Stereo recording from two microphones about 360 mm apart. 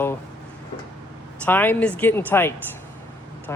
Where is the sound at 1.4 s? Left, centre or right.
Centre.